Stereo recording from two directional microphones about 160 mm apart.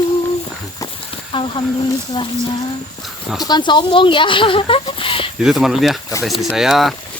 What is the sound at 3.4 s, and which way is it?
Speech, 25° left (ahead or behind).